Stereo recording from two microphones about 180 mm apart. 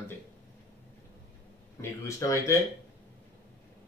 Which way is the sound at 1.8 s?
15° left (ahead or behind).